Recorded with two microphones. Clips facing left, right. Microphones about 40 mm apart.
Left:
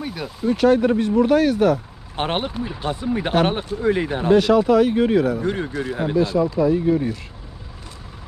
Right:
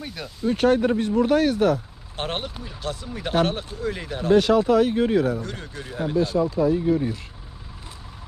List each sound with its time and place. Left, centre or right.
0.0 s speech: centre
0.7 s speech: left
2.1 s speech: left
4.3 s speech: left
5.4 s speech: left
6.1 s speech: left